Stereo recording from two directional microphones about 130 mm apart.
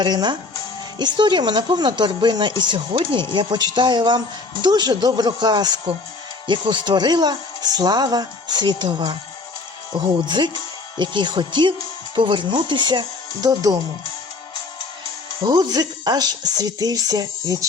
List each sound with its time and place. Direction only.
0.0 s speech: 35° right (ahead or behind)
10.2 s speech: 35° right (ahead or behind)
15.4 s speech: 30° right (ahead or behind)